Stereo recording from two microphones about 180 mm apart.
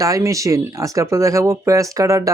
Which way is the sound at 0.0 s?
20° right (ahead or behind).